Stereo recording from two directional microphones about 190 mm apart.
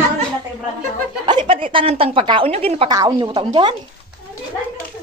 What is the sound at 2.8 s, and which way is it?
Speech, 20° right (ahead or behind).